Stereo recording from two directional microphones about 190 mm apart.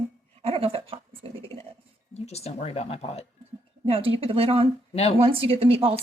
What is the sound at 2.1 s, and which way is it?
Speech, 35° left (ahead or behind).